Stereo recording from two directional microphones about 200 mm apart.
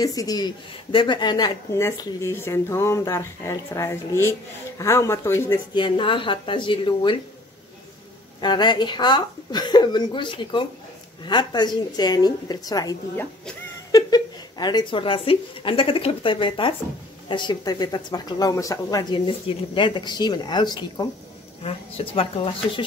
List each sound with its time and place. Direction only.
0.0 s speech: 15° left (ahead or behind)
8.4 s a woman's voice: 20° left (ahead or behind)